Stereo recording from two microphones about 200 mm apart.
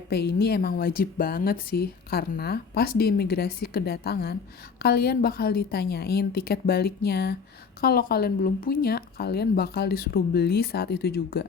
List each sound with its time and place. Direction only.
0.1 s speech: 55° left (ahead or behind)